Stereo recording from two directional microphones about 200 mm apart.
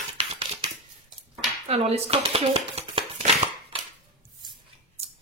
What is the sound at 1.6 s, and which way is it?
Shuffling cards, 30° right (ahead or behind).